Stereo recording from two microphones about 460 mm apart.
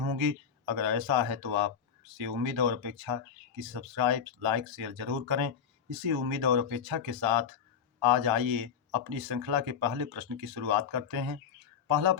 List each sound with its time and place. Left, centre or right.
0.0 s speech: right